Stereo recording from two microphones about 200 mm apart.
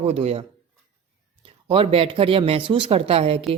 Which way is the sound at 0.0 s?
30° right (ahead or behind).